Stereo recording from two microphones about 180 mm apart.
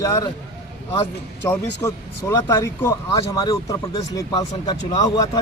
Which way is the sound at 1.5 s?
15° left (ahead or behind).